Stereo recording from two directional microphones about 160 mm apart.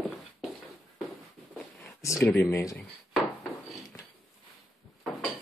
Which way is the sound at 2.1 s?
5° left (ahead or behind).